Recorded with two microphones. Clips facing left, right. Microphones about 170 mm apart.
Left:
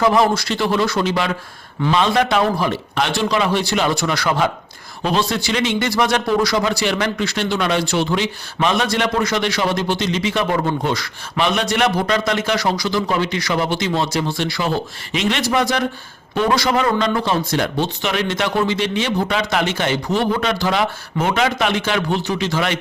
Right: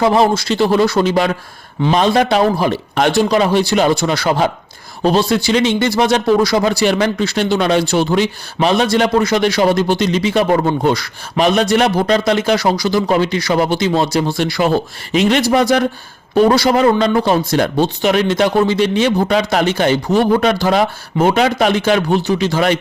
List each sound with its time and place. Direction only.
0.0 s speech: 30° right (ahead or behind)